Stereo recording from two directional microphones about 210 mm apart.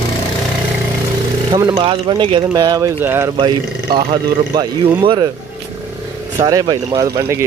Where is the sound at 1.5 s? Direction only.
20° right (ahead or behind).